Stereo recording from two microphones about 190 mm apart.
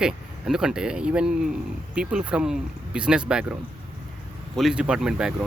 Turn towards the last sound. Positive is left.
turn(degrees=-5)  # may be behind; listen again after turning